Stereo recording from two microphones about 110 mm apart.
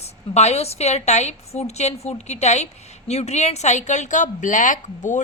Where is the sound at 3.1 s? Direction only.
80° left.